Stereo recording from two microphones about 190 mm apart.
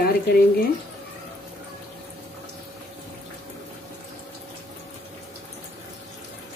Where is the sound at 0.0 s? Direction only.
50° left (ahead or behind).